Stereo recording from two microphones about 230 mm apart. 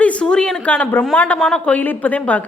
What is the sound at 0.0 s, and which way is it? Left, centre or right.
A woman's voice, centre.